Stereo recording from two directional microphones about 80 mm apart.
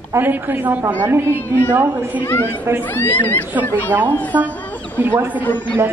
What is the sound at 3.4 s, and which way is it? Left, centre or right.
Speech, right.